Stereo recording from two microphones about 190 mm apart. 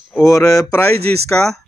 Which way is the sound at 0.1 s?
15° left (ahead or behind).